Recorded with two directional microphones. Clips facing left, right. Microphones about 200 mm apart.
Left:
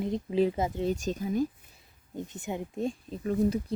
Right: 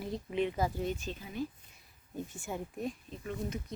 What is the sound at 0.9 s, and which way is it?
Speech, 45° left (ahead or behind).